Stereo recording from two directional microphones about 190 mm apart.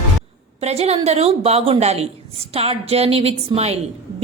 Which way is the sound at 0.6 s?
35° right (ahead or behind).